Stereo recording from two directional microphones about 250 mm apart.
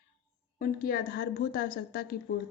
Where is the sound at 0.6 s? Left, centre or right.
Left.